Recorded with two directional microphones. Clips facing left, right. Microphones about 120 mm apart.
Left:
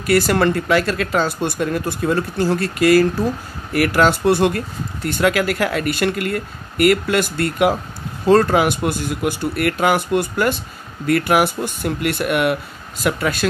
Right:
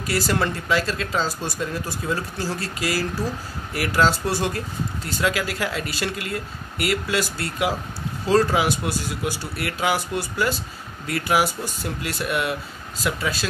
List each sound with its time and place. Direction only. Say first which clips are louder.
0.0 s speech: left 7 dB; 60° left (ahead or behind)